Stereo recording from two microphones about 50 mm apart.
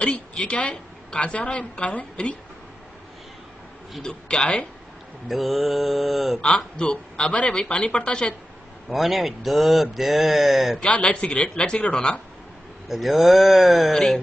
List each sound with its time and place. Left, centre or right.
0.0 s a woman's voice: left
4.0 s a woman's voice: centre
5.3 s speech: centre
6.4 s a woman's voice: left
8.8 s speech: centre
10.8 s a woman's voice: left
12.8 s speech: centre
13.9 s a sound: centre